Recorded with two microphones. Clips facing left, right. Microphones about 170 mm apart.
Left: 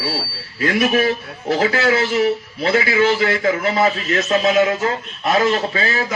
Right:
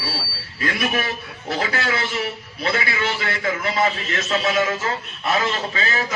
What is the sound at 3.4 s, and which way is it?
Speech, 35° left (ahead or behind).